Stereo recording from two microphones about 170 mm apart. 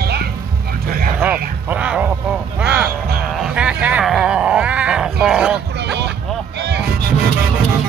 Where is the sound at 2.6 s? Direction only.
5° right (ahead or behind).